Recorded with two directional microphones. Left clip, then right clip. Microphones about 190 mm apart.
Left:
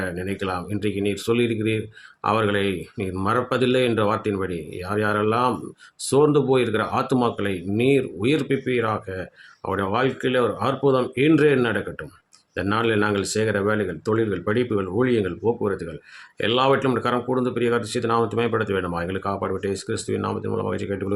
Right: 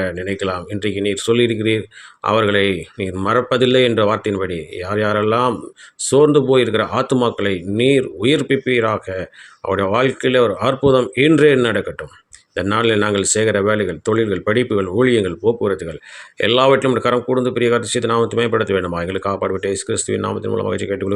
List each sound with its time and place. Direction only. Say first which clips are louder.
0.0 s speech: right 6 dB; 15° right (ahead or behind)